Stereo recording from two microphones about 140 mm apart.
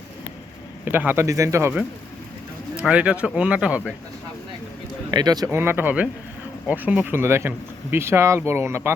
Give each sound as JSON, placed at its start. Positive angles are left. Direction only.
{"t": 0.9, "sound": "speech", "side_deg": -15}
{"t": 2.7, "sound": "speech", "side_deg": -10}
{"t": 5.1, "sound": "speech", "side_deg": -30}